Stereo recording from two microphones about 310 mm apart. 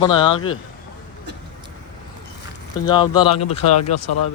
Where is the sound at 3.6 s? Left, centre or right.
Left.